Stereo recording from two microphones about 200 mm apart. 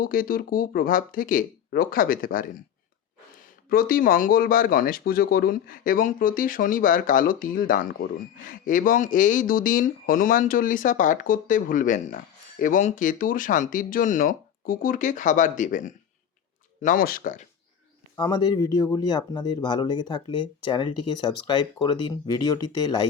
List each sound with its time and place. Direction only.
0.0 s speech: 45° left (ahead or behind)
3.7 s speech: 45° left (ahead or behind)
18.2 s speech: 20° left (ahead or behind)